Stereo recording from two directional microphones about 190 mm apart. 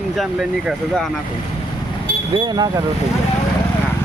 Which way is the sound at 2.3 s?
20° right (ahead or behind).